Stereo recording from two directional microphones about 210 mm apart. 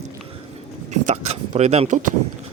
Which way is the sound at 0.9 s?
30° right (ahead or behind).